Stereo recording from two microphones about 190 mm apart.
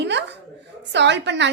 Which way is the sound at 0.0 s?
65° right (ahead or behind).